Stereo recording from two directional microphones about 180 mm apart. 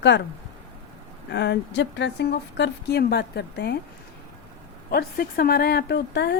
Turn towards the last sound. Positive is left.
turn(degrees=65)  # may be behind; listen again after turning